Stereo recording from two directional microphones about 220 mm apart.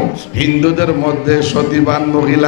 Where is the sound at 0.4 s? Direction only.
15° left (ahead or behind).